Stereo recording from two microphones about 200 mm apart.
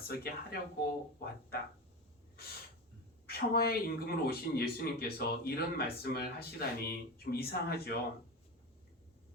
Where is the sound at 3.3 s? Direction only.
50° left (ahead or behind).